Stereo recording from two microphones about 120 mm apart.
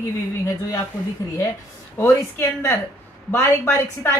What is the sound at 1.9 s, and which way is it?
A woman's voice, 25° left (ahead or behind).